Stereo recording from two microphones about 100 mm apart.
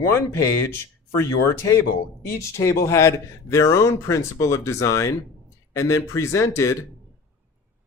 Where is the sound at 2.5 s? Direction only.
30° left (ahead or behind).